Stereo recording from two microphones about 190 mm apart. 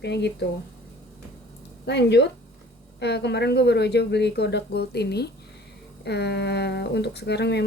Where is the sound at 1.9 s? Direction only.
65° left (ahead or behind).